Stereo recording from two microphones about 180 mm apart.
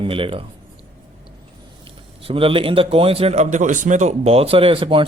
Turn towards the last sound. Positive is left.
turn(degrees=-30)  # may be behind; listen again after turning